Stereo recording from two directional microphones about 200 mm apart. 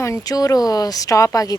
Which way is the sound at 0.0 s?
15° left (ahead or behind).